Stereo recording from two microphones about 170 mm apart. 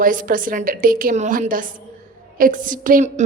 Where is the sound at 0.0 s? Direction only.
55° right (ahead or behind).